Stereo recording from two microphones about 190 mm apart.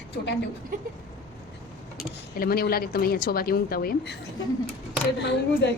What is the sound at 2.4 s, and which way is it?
A woman's voice, 50° left (ahead or behind).